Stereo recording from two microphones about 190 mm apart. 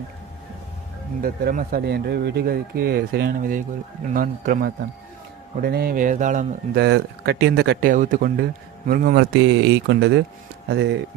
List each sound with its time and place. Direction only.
1.2 s speech: 50° right (ahead or behind)
6.7 s speech: 60° right (ahead or behind)
9.4 s speech: 70° right (ahead or behind)